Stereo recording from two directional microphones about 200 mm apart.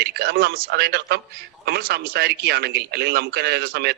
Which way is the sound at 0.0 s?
50° right (ahead or behind).